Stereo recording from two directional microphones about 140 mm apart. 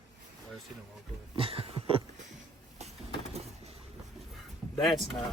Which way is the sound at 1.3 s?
40° right (ahead or behind).